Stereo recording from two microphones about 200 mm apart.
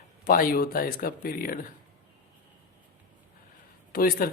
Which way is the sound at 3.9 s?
45° left (ahead or behind).